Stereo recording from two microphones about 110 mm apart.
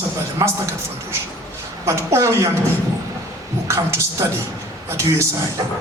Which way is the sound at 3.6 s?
25° right (ahead or behind).